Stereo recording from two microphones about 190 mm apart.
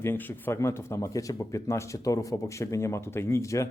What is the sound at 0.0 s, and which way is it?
Speech, 10° left (ahead or behind).